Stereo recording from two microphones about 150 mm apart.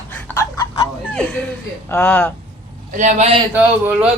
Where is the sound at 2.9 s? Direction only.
55° right (ahead or behind).